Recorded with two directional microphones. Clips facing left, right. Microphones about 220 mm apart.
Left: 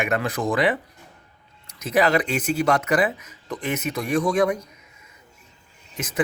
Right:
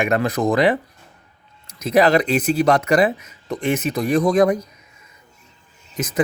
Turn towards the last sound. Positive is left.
turn(degrees=-40)  # may be behind; listen again after turning